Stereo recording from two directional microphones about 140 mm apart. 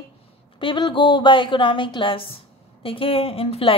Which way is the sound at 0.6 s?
35° left (ahead or behind).